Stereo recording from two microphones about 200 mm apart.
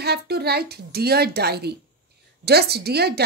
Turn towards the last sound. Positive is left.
turn(degrees=-55)  # may be behind; listen again after turning